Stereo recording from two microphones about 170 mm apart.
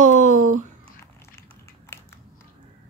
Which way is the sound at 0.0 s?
50° right (ahead or behind).